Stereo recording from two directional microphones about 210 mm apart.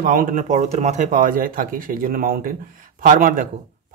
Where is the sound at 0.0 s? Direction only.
40° right (ahead or behind).